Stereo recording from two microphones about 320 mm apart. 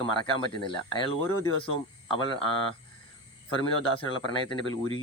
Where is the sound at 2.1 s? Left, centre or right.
Centre.